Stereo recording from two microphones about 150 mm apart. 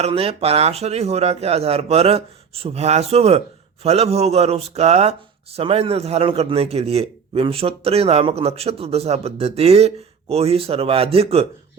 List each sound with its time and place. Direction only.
0.0 s a man's voice: 40° right (ahead or behind)